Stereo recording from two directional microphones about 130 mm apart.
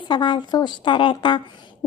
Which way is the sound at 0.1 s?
35° left (ahead or behind).